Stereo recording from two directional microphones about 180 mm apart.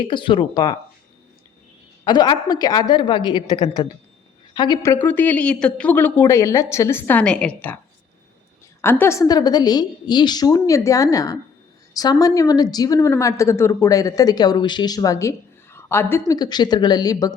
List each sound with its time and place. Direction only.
0.1 s a woman's voice: 25° left (ahead or behind)
2.0 s a woman's voice: 25° left (ahead or behind); by 7.8 s 10° left (ahead or behind)
8.8 s a woman's voice: 10° left (ahead or behind)